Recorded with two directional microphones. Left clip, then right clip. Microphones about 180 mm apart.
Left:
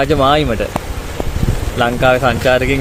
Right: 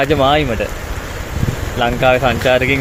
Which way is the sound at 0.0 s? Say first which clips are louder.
Left 1 dB; 20° left (ahead or behind).